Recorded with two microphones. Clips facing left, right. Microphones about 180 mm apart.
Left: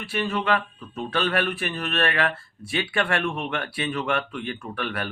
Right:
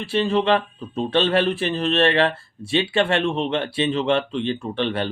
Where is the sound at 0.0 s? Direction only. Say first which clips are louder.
Right 6 dB; 30° right (ahead or behind).